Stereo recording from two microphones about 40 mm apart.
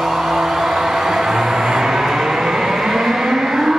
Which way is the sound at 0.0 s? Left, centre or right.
Centre.